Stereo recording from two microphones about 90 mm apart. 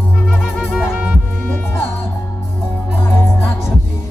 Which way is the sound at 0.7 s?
5° right (ahead or behind).